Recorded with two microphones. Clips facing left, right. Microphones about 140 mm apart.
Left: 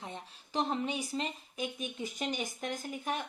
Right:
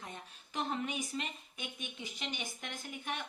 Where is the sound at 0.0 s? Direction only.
30° left (ahead or behind).